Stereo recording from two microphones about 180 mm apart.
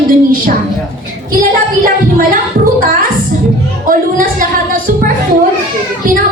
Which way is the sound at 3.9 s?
50° right (ahead or behind).